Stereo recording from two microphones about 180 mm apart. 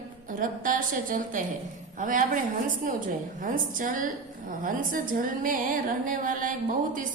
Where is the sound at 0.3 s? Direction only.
50° right (ahead or behind).